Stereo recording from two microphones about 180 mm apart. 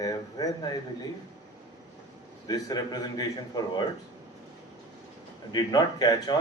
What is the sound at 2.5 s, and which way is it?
A man's voice, 20° left (ahead or behind).